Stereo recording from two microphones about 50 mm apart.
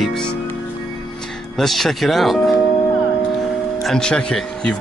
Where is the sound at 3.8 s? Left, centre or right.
Centre.